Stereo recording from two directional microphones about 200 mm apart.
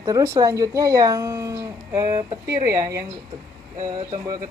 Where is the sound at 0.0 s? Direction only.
15° right (ahead or behind).